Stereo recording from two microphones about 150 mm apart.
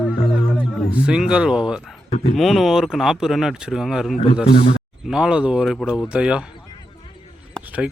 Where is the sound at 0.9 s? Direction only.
5° right (ahead or behind).